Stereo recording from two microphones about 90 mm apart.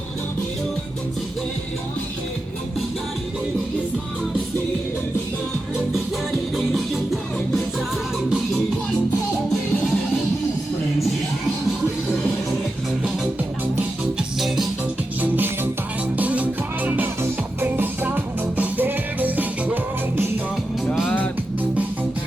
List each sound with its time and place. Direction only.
6.7 s music: centre (ahead or behind)
9.5 s music: centre (ahead or behind)
14.2 s music: centre (ahead or behind)
15.2 s music: 20° right (ahead or behind)